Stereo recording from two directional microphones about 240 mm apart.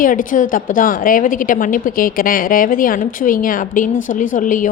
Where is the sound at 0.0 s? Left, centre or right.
Left.